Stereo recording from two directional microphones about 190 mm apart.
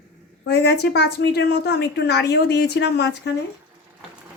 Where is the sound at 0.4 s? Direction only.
60° left (ahead or behind).